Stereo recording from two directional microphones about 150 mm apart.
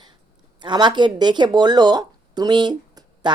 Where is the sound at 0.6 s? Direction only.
30° right (ahead or behind).